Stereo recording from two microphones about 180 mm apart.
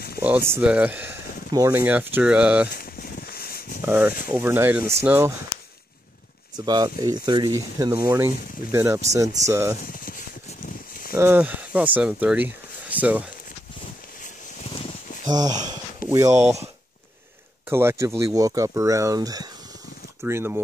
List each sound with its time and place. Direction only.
0.5 s speech: 5° right (ahead or behind)
2.7 s a sound: 55° left (ahead or behind)
3.8 s speech: 10° right (ahead or behind)
6.5 s speech: 20° right (ahead or behind)
9.9 s a sound: 50° left (ahead or behind)
11.1 s speech: 10° right (ahead or behind)
14.6 s a sound: 30° left (ahead or behind)
15.2 s speech: 20° right (ahead or behind)
17.6 s speech: 15° right (ahead or behind)